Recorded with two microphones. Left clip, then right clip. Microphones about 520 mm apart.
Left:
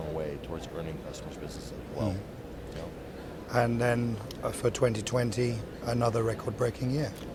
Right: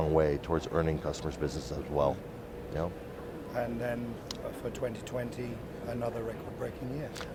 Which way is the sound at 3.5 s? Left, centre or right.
Left.